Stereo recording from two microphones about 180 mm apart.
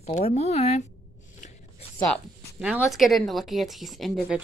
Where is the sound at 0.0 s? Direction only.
35° left (ahead or behind).